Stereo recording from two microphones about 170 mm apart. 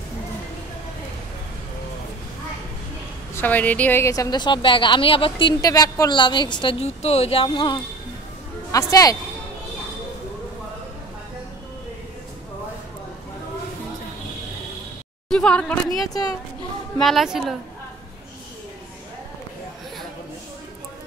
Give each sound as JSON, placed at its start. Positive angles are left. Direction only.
{"t": 3.3, "sound": "a woman's voice", "side_deg": 10}
{"t": 5.7, "sound": "a woman's voice", "side_deg": 20}
{"t": 15.2, "sound": "speech", "side_deg": 5}
{"t": 17.0, "sound": "a woman's voice", "side_deg": 0}